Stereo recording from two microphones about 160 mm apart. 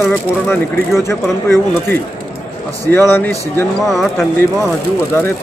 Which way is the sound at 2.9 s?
15° left (ahead or behind).